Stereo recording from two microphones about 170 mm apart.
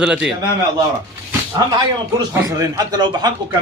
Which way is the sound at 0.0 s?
5° right (ahead or behind).